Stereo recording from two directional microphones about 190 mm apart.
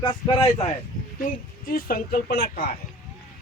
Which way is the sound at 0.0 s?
20° left (ahead or behind).